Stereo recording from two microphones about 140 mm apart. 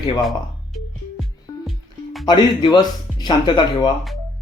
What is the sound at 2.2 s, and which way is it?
A man's voice, 30° left (ahead or behind).